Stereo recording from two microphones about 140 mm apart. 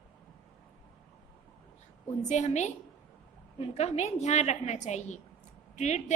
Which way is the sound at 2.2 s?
55° left (ahead or behind).